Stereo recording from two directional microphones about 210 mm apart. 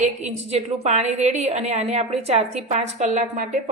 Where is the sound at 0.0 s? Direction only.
30° right (ahead or behind).